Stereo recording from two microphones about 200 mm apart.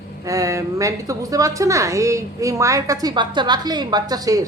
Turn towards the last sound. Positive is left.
turn(degrees=-20)  # may be behind; listen again after turning